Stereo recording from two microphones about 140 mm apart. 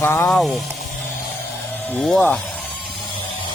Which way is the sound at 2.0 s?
5° left (ahead or behind).